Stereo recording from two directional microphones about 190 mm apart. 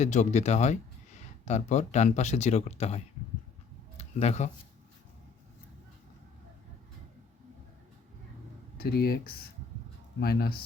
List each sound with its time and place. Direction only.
0.0 s speech: 40° left (ahead or behind)
3.9 s a sound: 35° left (ahead or behind)
8.8 s speech: 55° left (ahead or behind)